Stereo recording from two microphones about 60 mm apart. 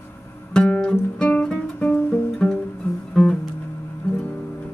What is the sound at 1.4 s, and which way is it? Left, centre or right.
Music, centre.